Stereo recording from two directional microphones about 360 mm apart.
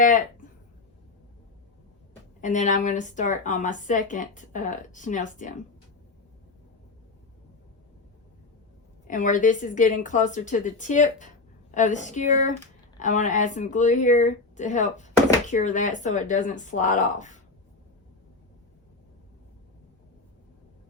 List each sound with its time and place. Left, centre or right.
2.4 s a woman's voice: left
9.0 s a woman's voice: left